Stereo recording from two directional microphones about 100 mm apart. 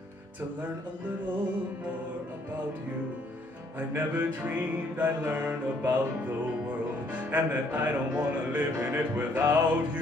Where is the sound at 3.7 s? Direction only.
15° right (ahead or behind).